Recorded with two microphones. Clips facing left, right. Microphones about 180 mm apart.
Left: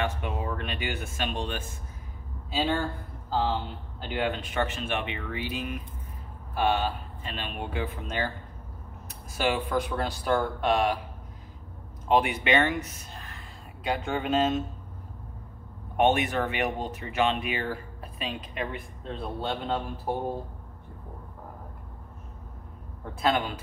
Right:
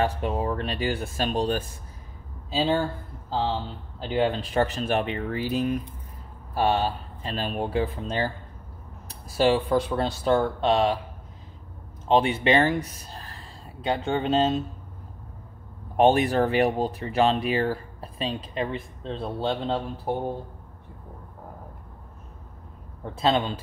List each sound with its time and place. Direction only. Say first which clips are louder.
0.0 s speech: right 5 dB; 35° right (ahead or behind)
3.3 s speech: right 1 dB; 30° right (ahead or behind)
9.3 s speech: right 6 dB; 30° right (ahead or behind)
12.1 s speech: right 3 dB; 25° right (ahead or behind)
16.0 s speech: right 4 dB; 35° right (ahead or behind)
23.2 s speech: right 3 dB; 25° right (ahead or behind)